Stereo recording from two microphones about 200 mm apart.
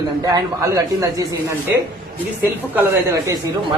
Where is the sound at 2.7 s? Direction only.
15° right (ahead or behind).